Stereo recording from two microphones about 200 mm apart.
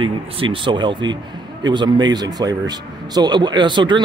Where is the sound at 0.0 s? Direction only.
25° right (ahead or behind).